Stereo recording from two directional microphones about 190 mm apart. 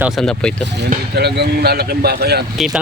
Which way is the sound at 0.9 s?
60° right (ahead or behind).